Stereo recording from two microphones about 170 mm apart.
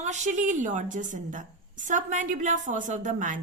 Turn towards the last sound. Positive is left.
turn(degrees=-50)  # may be behind; listen again after turning